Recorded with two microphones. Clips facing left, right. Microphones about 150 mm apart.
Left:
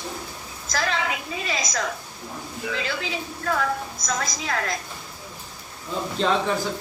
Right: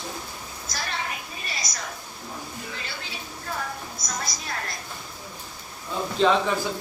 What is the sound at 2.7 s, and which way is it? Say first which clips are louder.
A woman's voice: left 9 dB; 90° left.